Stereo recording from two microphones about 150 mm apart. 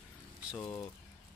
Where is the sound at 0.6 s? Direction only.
20° left (ahead or behind).